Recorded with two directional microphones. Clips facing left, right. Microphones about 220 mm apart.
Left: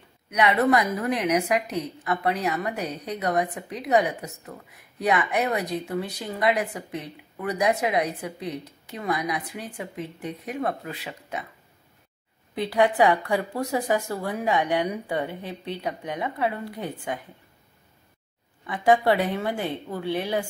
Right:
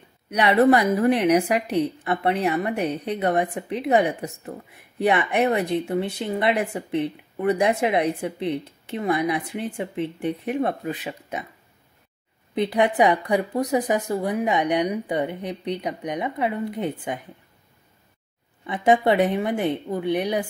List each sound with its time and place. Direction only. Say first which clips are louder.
0.3 s a woman's voice: right 4 dB; 30° right (ahead or behind)
12.5 s a woman's voice: right 1 dB; 20° right (ahead or behind)
18.7 s a woman's voice: right 1 dB; 20° right (ahead or behind)